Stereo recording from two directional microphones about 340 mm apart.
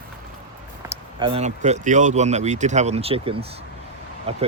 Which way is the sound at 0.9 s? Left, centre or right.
Centre.